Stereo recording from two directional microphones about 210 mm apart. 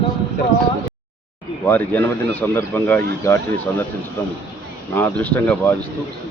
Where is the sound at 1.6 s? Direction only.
10° left (ahead or behind).